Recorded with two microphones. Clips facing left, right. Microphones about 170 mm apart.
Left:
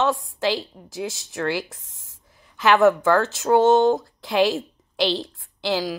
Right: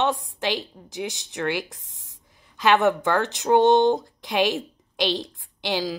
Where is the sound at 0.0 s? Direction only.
20° right (ahead or behind).